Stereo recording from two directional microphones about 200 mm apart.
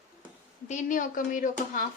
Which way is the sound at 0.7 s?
40° left (ahead or behind).